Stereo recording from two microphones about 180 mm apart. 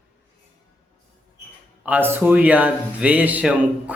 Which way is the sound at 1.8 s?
10° right (ahead or behind).